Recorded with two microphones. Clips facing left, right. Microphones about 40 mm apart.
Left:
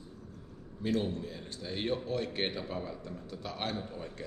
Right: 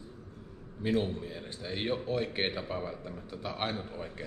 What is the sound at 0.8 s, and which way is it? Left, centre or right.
A man's voice, centre.